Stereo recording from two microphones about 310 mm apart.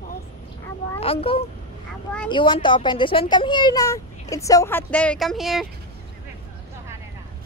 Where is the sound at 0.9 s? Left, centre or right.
Centre.